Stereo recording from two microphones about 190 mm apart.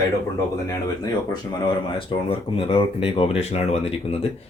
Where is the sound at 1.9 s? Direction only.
30° left (ahead or behind).